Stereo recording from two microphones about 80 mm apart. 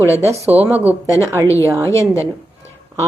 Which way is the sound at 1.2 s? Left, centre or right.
Right.